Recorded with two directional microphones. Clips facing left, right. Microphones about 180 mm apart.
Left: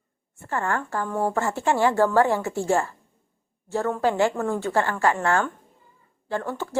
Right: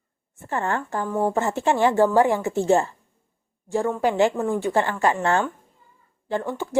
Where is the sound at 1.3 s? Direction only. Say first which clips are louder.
Right 2 dB; 20° right (ahead or behind).